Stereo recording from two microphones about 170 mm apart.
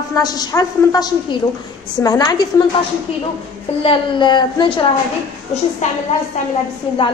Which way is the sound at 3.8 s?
25° left (ahead or behind).